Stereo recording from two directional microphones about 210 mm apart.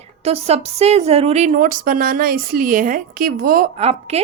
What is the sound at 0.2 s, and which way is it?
Speech, 30° right (ahead or behind).